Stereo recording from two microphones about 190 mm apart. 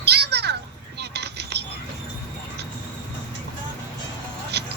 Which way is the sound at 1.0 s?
60° right (ahead or behind).